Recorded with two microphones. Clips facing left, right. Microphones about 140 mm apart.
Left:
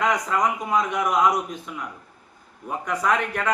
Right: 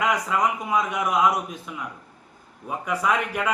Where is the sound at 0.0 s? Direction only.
5° right (ahead or behind).